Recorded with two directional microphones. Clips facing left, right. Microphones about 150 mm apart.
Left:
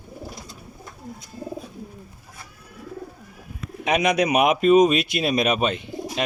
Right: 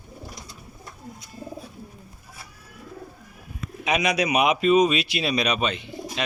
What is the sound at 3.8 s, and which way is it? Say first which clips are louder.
Speech: left 3 dB; 55° left (ahead or behind).